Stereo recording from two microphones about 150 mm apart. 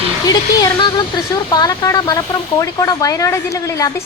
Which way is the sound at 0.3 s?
25° left (ahead or behind).